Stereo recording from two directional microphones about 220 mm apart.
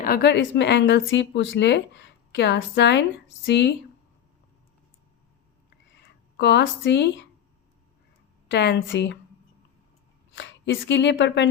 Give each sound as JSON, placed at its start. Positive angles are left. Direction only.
{"t": 0.0, "sound": "a woman's voice", "side_deg": 45}
{"t": 5.9, "sound": "speech", "side_deg": 50}
{"t": 8.4, "sound": "a woman's voice", "side_deg": 50}
{"t": 10.3, "sound": "a woman's voice", "side_deg": 55}